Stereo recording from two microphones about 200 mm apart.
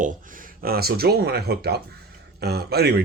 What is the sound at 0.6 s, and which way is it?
Speech, 50° right (ahead or behind).